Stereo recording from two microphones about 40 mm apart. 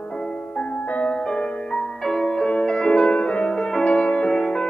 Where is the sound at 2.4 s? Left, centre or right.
Left.